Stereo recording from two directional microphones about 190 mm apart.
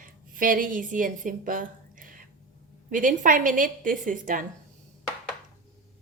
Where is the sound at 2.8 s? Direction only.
45° right (ahead or behind).